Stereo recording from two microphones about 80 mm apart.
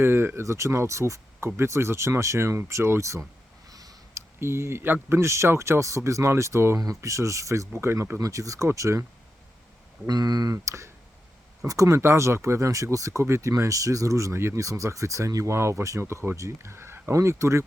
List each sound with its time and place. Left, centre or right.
0.0 s speech: right
3.7 s a sound: right
4.1 s speech: right
8.2 s speech: right
10.1 s speech: right